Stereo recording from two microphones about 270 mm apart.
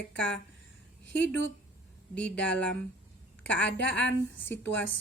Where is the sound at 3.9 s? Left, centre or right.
Centre.